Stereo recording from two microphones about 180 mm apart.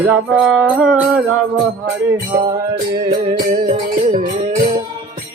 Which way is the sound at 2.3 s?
20° right (ahead or behind).